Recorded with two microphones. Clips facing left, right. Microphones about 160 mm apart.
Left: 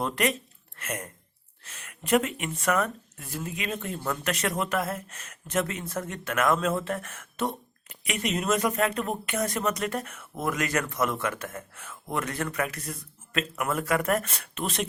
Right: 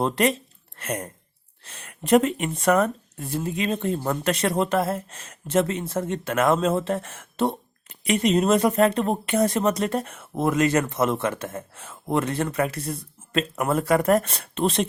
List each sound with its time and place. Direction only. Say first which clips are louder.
0.0 s speech: right 5 dB; 30° right (ahead or behind)